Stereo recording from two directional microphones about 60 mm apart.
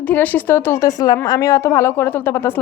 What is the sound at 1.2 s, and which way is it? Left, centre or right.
Speech, left.